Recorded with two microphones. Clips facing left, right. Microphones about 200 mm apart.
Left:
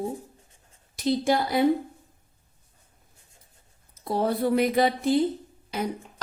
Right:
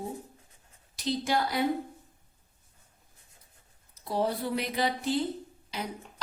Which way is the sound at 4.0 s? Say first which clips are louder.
Left 5 dB; 55° left (ahead or behind).